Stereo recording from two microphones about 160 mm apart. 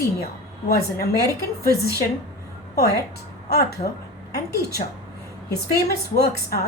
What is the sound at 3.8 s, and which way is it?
Speech, 55° left (ahead or behind).